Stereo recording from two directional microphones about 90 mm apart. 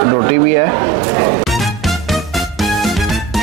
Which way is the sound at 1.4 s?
Centre (ahead or behind).